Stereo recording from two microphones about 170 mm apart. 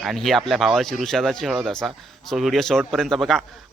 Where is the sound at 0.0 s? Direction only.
Centre (ahead or behind).